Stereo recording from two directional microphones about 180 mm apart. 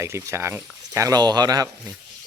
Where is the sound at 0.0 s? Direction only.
15° right (ahead or behind).